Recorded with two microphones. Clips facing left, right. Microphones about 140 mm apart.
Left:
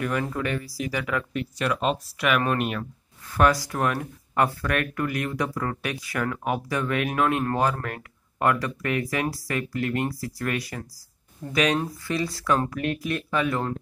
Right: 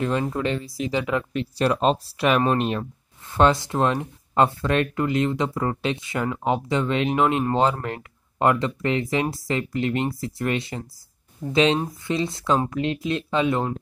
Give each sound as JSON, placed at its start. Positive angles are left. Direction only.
{"t": 0.0, "sound": "speech", "side_deg": -25}